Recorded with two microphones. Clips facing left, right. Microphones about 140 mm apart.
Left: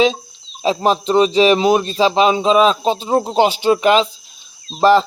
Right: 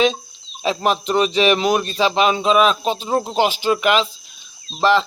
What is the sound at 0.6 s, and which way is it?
Speech, 30° left (ahead or behind).